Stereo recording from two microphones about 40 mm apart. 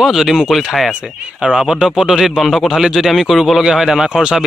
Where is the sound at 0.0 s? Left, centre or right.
Centre.